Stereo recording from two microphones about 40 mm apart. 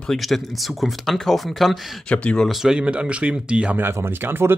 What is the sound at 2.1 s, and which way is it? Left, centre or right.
Speech, left.